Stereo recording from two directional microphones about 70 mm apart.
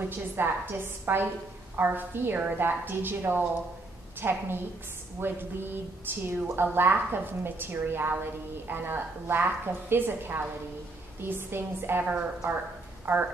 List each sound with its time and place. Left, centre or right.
0.0 s a woman's voice: right